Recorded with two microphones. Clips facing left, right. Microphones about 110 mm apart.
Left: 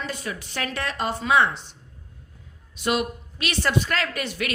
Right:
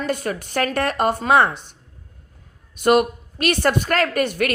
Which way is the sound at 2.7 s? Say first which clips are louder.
Right 8 dB; 50° right (ahead or behind).